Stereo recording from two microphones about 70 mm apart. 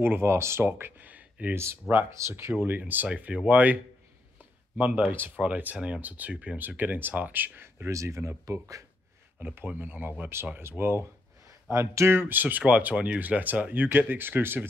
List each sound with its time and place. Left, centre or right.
0.0 s speech: right
1.5 s speech: right
2.6 s speech: right
7.9 s speech: right
9.6 s speech: right
12.2 s speech: right